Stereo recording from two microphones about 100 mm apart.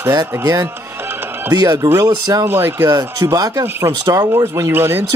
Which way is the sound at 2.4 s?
25° right (ahead or behind).